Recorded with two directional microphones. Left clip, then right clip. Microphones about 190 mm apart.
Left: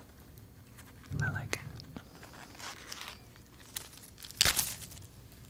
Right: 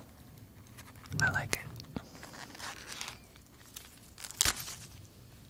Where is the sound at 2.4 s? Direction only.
10° left (ahead or behind).